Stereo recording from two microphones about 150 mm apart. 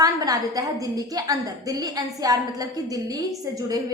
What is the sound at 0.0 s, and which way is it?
A woman's voice, 25° right (ahead or behind).